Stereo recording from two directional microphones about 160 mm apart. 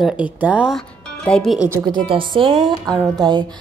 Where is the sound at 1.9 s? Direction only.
30° right (ahead or behind).